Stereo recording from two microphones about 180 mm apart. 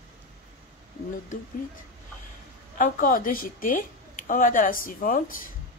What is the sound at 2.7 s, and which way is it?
Speech, 50° left (ahead or behind).